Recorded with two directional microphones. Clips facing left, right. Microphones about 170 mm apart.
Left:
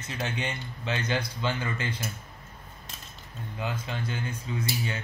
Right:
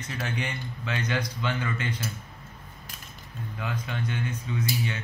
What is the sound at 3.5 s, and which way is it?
Speech, 30° left (ahead or behind).